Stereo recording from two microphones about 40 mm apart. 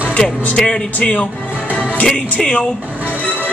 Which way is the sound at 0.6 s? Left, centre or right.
Left.